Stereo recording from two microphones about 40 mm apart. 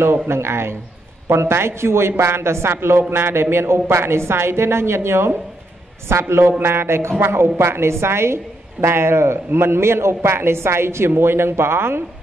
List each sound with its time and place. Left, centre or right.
0.0 s a man's voice: right